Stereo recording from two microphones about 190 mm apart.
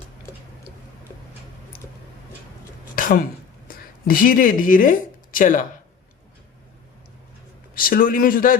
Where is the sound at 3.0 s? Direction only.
50° left (ahead or behind).